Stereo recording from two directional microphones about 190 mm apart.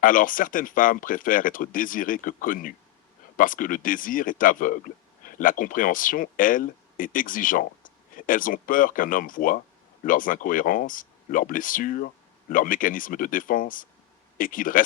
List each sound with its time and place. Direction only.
0.0 s speech: 45° left (ahead or behind)